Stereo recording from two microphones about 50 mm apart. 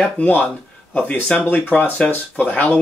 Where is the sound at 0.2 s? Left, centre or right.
Left.